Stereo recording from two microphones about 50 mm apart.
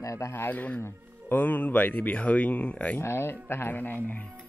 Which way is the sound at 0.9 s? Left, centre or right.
Right.